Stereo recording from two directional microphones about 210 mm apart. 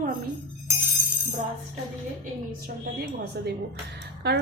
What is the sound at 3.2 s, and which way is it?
Speech, 50° right (ahead or behind).